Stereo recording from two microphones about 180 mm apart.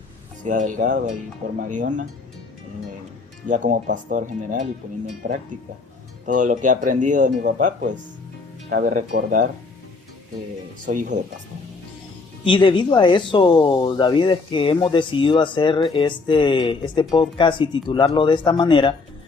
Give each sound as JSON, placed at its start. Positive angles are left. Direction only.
{"t": 0.4, "sound": "speech", "side_deg": -45}
{"t": 3.5, "sound": "speech", "side_deg": -45}
{"t": 6.2, "sound": "speech", "side_deg": -45}
{"t": 10.8, "sound": "speech", "side_deg": -45}
{"t": 12.5, "sound": "speech", "side_deg": 25}